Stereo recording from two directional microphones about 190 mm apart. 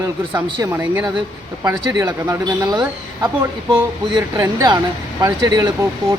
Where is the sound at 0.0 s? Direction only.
15° right (ahead or behind).